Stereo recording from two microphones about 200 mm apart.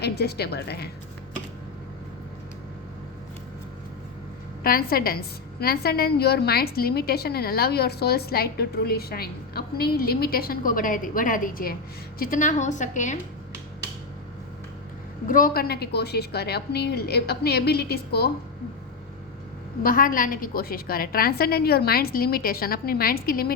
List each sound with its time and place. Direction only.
0.0 s a woman's voice: 55° left (ahead or behind)
4.6 s a woman's voice: 50° left (ahead or behind)
15.3 s a woman's voice: 45° left (ahead or behind)
19.8 s a woman's voice: 45° left (ahead or behind)